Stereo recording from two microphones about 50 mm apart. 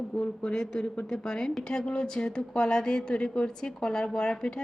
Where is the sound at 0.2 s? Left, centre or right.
Centre.